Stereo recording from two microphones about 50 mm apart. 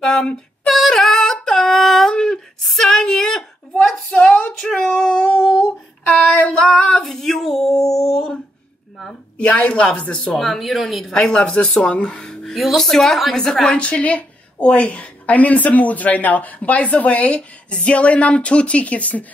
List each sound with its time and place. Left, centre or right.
0.0 s speech: centre
0.7 s a sound: centre
2.6 s a woman's voice: centre; by 4.6 s left
4.6 s female singing: centre
5.4 s a sound: centre
6.0 s a sound: left
6.5 s female singing: centre
9.4 s a woman's voice: left
10.3 s a woman's voice: centre
11.1 s speech: centre
12.5 s a woman's voice: centre
13.7 s a woman's voice: left